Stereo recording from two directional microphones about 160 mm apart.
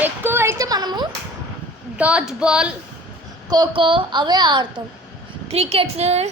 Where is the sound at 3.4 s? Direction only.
25° right (ahead or behind).